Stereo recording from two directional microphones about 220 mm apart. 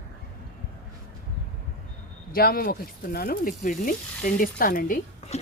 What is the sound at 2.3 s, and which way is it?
Speech, 40° left (ahead or behind).